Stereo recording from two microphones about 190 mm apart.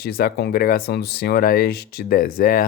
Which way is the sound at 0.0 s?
50° left (ahead or behind).